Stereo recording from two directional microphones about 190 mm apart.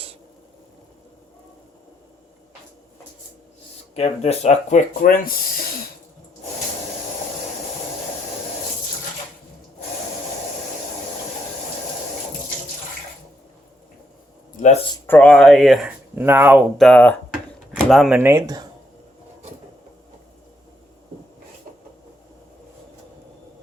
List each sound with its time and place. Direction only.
3.9 s speech: 35° left (ahead or behind)
14.5 s a sound: 40° left (ahead or behind)
15.0 s speech: 10° left (ahead or behind); by 16.6 s 10° right (ahead or behind)
16.7 s speech: 5° left (ahead or behind)
17.7 s a sound: centre (ahead or behind)
18.2 s speech: 15° right (ahead or behind)